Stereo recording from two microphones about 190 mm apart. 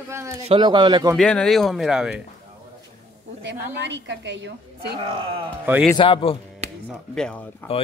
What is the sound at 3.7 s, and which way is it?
A woman's voice, 70° right (ahead or behind).